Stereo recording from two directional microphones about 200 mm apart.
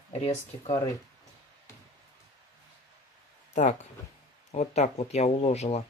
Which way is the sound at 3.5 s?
35° left (ahead or behind).